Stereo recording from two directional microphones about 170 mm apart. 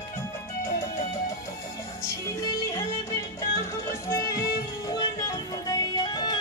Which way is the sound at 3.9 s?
15° left (ahead or behind).